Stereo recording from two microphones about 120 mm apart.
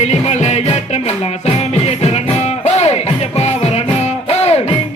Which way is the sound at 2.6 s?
65° left (ahead or behind).